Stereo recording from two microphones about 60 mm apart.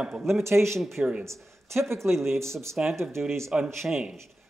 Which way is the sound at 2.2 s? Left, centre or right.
Right.